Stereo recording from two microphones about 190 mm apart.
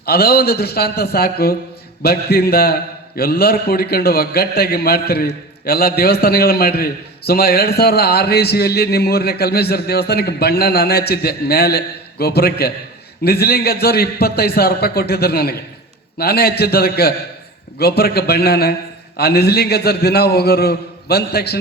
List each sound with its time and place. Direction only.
0.0 s a man's voice: 55° left (ahead or behind)